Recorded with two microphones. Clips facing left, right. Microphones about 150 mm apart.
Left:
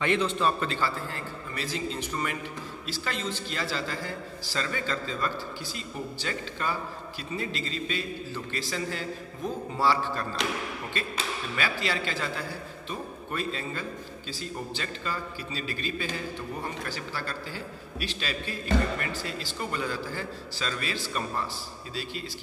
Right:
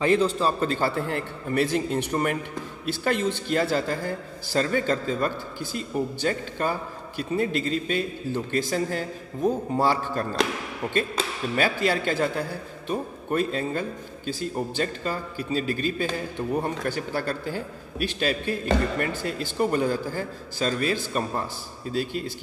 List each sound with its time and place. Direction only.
0.0 s a man's voice: 40° right (ahead or behind)
11.5 s a man's voice: 50° right (ahead or behind)